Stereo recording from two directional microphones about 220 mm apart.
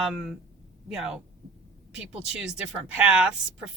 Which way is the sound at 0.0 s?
Centre (ahead or behind).